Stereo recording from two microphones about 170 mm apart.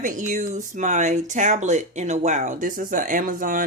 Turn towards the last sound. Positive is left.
turn(degrees=-55)  # may be behind; listen again after turning